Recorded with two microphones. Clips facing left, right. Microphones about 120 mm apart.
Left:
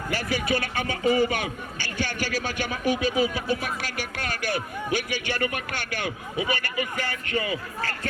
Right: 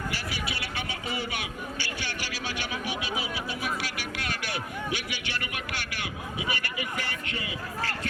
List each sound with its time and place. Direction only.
0.1 s speech: 50° left (ahead or behind)